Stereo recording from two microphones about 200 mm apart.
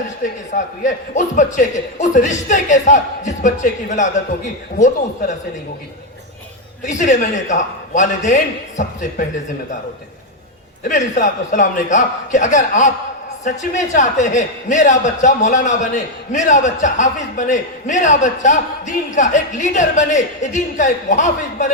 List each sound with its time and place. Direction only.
0.5 s a man's voice: 40° left (ahead or behind)
6.8 s a man's voice: 35° left (ahead or behind)
10.8 s a man's voice: 40° left (ahead or behind)